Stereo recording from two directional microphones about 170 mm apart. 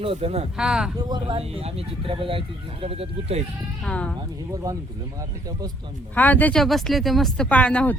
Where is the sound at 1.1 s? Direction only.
30° right (ahead or behind).